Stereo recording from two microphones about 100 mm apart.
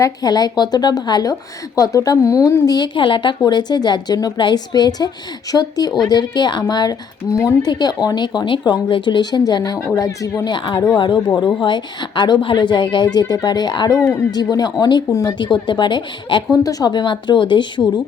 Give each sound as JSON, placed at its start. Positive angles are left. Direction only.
{"t": 0.0, "sound": "a woman's voice", "side_deg": 40}
{"t": 3.4, "sound": "a woman's voice", "side_deg": 45}
{"t": 7.3, "sound": "a woman's voice", "side_deg": 30}
{"t": 7.7, "sound": "a woman's voice", "side_deg": 40}
{"t": 10.5, "sound": "a woman's voice", "side_deg": 50}